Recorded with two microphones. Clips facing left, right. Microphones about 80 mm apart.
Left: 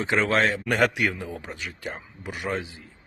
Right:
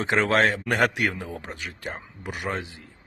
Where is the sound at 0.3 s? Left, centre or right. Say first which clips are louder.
Right 1 dB; right.